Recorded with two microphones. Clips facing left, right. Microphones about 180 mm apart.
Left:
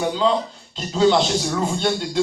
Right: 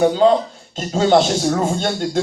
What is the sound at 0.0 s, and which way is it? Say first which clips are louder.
Speech: right 6 dB; 50° right (ahead or behind).